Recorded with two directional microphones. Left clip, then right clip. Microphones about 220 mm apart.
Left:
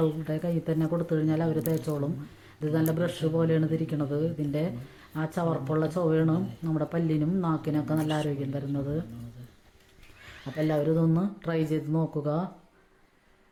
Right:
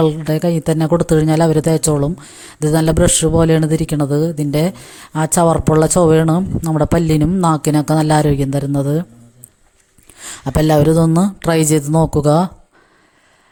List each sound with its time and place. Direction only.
0.0 s speech: 45° right (ahead or behind)
10.2 s speech: 50° right (ahead or behind)